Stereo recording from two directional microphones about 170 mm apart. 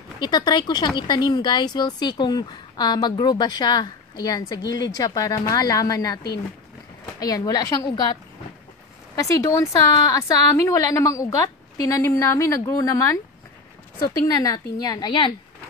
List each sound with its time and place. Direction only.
0.2 s speech: 25° left (ahead or behind)
7.2 s speech: 20° left (ahead or behind)
9.1 s speech: 20° left (ahead or behind)
14.2 s speech: 20° left (ahead or behind)